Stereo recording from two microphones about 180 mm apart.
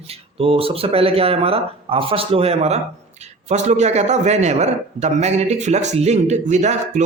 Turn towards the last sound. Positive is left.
turn(degrees=-40)  # may be behind; listen again after turning